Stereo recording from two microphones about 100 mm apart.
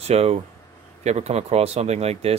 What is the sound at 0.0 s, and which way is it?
Speech, 90° right.